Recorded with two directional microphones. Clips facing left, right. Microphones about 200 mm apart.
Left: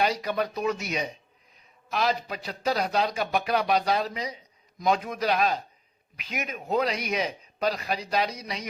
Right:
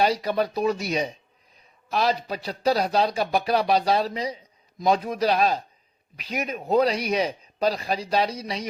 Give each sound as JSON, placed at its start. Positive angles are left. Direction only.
{"t": 0.0, "sound": "a man's voice", "side_deg": -30}